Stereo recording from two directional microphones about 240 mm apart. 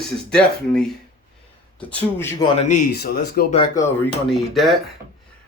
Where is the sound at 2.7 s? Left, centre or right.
Left.